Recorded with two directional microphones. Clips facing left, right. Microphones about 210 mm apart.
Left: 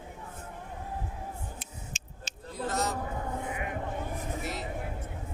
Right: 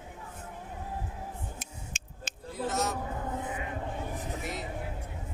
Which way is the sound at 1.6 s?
55° right (ahead or behind).